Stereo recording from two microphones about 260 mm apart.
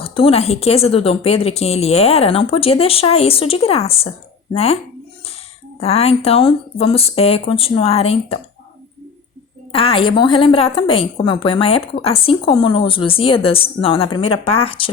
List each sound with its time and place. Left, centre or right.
0.0 s a woman's voice: left
5.8 s a woman's voice: left
9.7 s a woman's voice: left